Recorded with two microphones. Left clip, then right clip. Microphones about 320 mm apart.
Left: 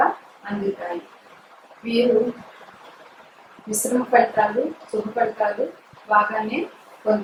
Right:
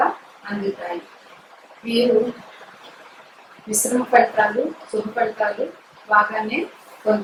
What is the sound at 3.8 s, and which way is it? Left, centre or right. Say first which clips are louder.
Speech: right 2 dB; centre.